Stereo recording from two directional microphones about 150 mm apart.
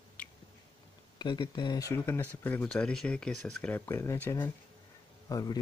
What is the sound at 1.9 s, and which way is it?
Speech, 15° left (ahead or behind).